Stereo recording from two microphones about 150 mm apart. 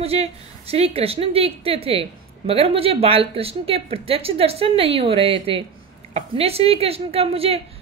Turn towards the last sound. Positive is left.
turn(degrees=-40)  # may be behind; listen again after turning